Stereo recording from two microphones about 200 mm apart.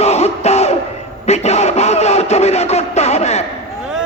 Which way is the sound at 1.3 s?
35° left (ahead or behind).